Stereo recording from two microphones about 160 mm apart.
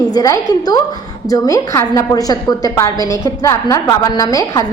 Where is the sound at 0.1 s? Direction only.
25° left (ahead or behind).